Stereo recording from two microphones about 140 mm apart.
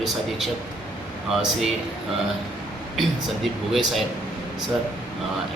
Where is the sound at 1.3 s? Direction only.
Centre (ahead or behind).